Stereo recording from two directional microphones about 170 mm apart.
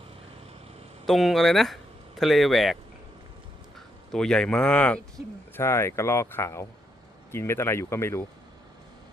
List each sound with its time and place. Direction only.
1.0 s speech: centre (ahead or behind)
3.8 s speech: 5° left (ahead or behind)